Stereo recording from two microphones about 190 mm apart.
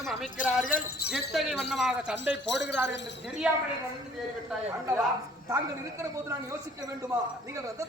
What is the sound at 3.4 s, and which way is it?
Speech, 5° right (ahead or behind).